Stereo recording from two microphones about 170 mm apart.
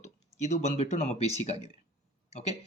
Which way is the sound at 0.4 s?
40° left (ahead or behind).